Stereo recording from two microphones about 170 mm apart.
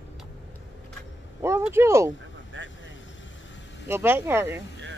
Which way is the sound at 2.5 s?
90° right.